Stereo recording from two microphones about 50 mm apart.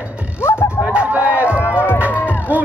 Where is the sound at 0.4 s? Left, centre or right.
Left.